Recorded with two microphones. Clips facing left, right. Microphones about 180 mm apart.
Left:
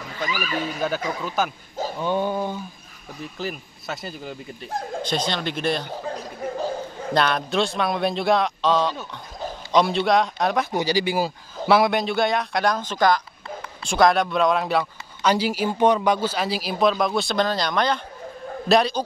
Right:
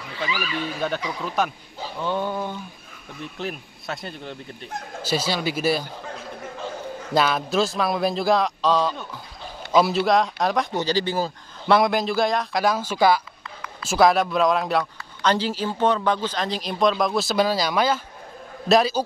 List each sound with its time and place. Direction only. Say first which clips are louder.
0.1 s speech: left 1 dB; 45° left (ahead or behind)
0.7 s speech: left 1 dB; centre (ahead or behind)
2.0 s speech: left 2 dB; 15° left (ahead or behind)
3.2 s speech: even; centre (ahead or behind)
7.2 s speech: right 1 dB; 5° right (ahead or behind)
10.7 s speech: left 1 dB; 10° left (ahead or behind)